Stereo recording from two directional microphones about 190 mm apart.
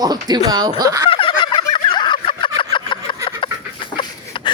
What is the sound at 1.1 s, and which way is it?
Fowl, 25° left (ahead or behind).